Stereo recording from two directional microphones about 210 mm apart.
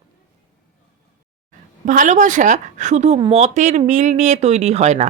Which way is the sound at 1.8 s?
35° right (ahead or behind).